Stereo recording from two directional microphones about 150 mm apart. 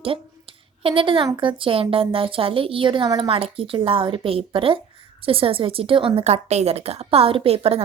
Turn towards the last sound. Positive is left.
turn(degrees=-40)  # may be behind; listen again after turning